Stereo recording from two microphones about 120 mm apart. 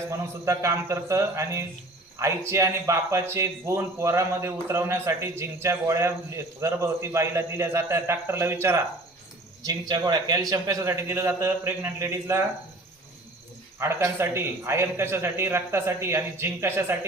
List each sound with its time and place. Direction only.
0.2 s speech: 25° right (ahead or behind)
9.6 s speech: 35° right (ahead or behind)
13.7 s speech: 20° right (ahead or behind)